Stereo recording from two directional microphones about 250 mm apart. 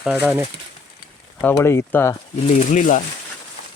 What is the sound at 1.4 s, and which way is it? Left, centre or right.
Speech, centre.